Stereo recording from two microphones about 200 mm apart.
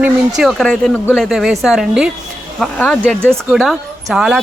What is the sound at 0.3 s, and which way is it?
Speech, centre (ahead or behind).